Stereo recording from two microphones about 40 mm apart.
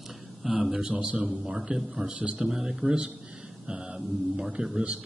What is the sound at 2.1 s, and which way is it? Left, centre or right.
Speech, right.